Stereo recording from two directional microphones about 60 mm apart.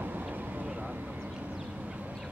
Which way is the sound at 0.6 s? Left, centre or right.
Centre.